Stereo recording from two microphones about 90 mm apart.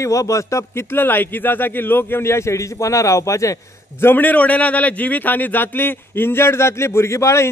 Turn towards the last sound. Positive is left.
turn(degrees=30)  # may be behind; listen again after turning